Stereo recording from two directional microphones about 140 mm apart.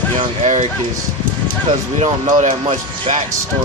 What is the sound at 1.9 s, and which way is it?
Speech, 50° right (ahead or behind).